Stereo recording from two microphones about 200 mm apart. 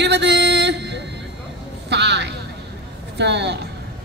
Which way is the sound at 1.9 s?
60° right (ahead or behind).